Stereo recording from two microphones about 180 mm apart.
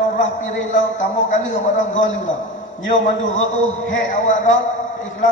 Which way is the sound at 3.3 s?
40° left (ahead or behind).